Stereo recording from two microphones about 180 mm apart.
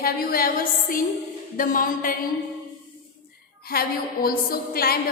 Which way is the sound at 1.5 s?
50° left (ahead or behind).